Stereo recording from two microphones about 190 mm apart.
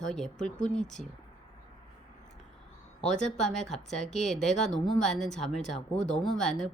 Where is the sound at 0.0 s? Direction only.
5° left (ahead or behind).